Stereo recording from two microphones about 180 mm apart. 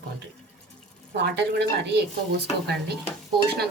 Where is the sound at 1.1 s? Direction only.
70° right (ahead or behind).